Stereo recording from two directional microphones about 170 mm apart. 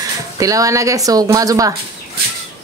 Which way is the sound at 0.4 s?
20° right (ahead or behind).